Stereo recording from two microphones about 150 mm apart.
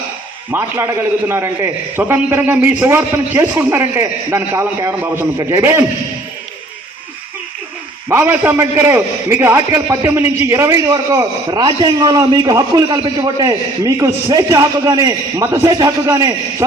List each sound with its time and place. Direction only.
0.5 s a man's voice: 15° right (ahead or behind)
8.1 s a man's voice: 10° right (ahead or behind)